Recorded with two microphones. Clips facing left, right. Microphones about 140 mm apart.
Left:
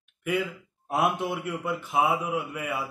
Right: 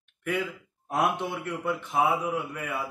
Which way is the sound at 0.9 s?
5° left (ahead or behind).